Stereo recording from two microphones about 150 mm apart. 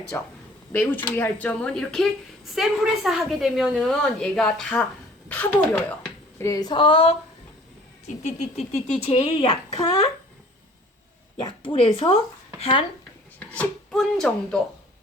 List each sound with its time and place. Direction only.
0.1 s a woman's voice: 15° left (ahead or behind)
6.4 s speech: 25° left (ahead or behind)
8.0 s speech: 50° left (ahead or behind)
11.3 s speech: 35° left (ahead or behind)
13.6 s a woman's voice: 5° left (ahead or behind)